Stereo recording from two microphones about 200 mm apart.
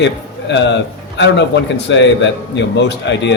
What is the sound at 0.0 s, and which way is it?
A man's voice, 60° left (ahead or behind).